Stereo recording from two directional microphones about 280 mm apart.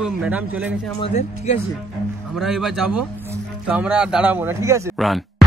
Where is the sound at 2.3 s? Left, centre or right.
Centre.